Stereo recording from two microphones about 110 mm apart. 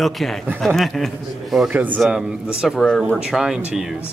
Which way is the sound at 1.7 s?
15° right (ahead or behind).